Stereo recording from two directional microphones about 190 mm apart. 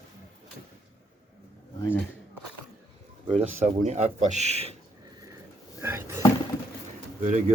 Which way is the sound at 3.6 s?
35° right (ahead or behind).